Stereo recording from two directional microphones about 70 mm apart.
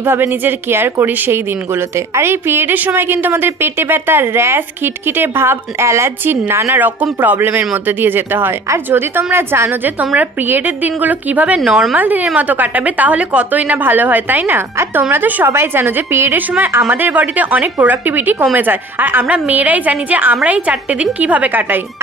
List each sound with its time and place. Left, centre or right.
0.0 s a woman's voice: right
11.1 s a woman's voice: right
11.6 s a woman's voice: centre
11.9 s a woman's voice: right